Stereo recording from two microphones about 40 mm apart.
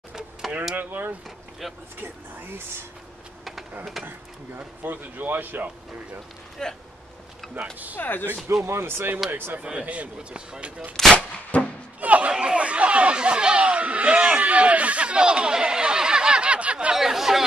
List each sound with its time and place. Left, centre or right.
0.7 s speech: right
4.8 s a man's voice: right
6.6 s speech: centre
7.4 s a sound: centre
7.9 s speech: left
8.7 s speech: right
9.3 s speech: right
9.6 s speech: right
11.0 s speech: centre
11.5 s music: left
12.0 s a sound: right
12.3 s a sound: right
16.9 s chatter: centre